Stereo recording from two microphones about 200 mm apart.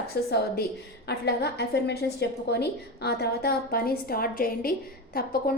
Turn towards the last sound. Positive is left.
turn(degrees=50)  # may be behind; listen again after turning